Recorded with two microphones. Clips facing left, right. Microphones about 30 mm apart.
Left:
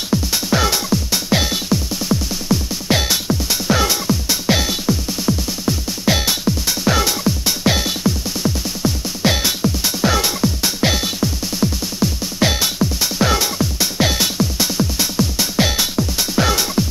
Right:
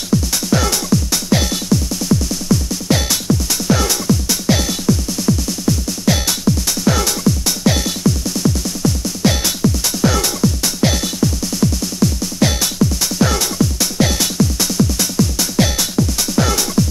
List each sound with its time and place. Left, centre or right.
0.1 s music: centre